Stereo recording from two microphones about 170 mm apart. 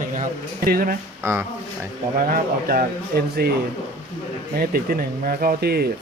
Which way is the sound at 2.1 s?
60° right (ahead or behind).